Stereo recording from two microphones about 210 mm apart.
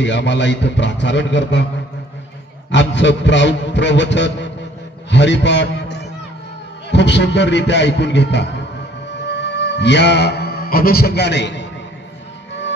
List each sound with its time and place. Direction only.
0.0 s a man's voice: 55° left (ahead or behind)
2.7 s a man's voice: 60° left (ahead or behind)
9.3 s music: 55° left (ahead or behind)